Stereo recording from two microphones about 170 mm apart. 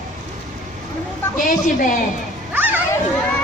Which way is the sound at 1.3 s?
50° left (ahead or behind).